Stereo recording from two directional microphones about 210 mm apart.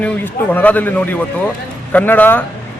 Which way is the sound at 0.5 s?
10° left (ahead or behind).